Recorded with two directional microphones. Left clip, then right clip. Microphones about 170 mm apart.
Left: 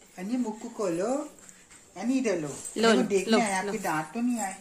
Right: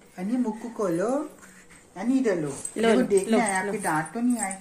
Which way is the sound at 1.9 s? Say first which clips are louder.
Right 3 dB; 15° left (ahead or behind).